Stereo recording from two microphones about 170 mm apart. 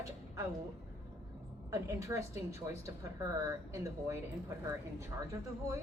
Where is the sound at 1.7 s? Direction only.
15° right (ahead or behind).